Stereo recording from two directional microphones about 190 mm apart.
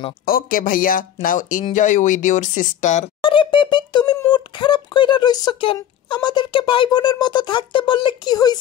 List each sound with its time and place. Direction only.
0.2 s speech: 50° left (ahead or behind); by 8.5 s 20° left (ahead or behind)